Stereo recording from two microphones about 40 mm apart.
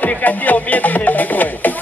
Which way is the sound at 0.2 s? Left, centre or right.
Left.